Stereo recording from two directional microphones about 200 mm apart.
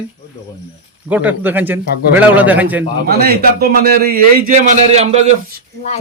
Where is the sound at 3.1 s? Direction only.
50° right (ahead or behind); by 5.3 s 35° right (ahead or behind).